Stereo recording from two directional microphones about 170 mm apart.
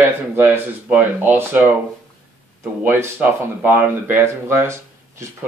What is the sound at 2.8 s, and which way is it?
Speech, 10° right (ahead or behind).